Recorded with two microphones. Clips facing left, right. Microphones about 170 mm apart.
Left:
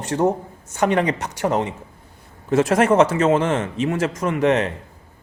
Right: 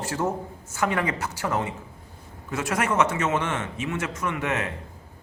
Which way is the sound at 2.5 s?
35° left (ahead or behind).